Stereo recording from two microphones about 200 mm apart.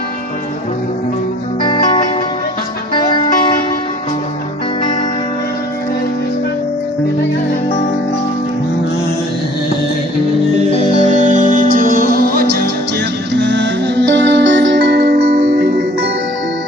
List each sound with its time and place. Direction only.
1.6 s music: 20° left (ahead or behind)
10.7 s music: 30° left (ahead or behind)
11.2 s music: 40° right (ahead or behind)
13.3 s music: 60° right (ahead or behind)